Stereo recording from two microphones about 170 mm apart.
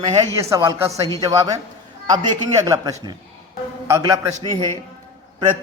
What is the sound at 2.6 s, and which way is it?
Speech, 20° right (ahead or behind).